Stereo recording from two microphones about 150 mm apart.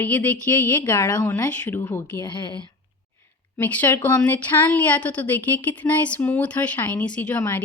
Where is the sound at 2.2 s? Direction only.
30° left (ahead or behind).